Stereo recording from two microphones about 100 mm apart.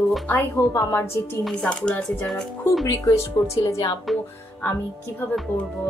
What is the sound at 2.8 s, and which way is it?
Speech, 35° left (ahead or behind).